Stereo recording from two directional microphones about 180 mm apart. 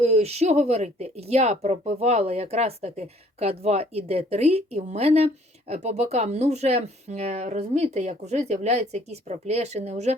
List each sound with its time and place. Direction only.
0.0 s speech: 35° right (ahead or behind)